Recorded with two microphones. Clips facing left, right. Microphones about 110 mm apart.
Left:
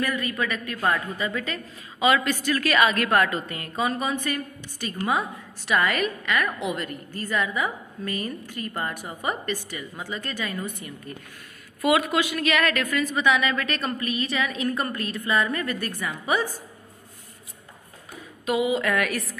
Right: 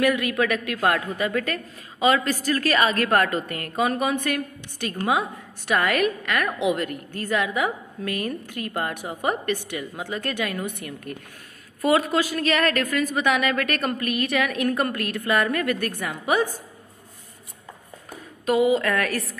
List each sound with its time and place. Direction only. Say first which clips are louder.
0.0 s a man's voice: right 5 dB; 85° right
0.8 s a woman's voice: right 2 dB; 65° right (ahead or behind)
2.0 s a man's voice: right 1 dB; 35° right (ahead or behind); by 11.1 s 65° right (ahead or behind)
11.8 s a woman's voice: right 1 dB; 35° right (ahead or behind)
18.4 s a woman's voice: right 4 dB; 40° right (ahead or behind)